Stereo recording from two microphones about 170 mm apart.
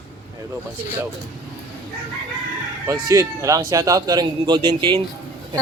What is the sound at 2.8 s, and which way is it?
A man's voice, 20° right (ahead or behind).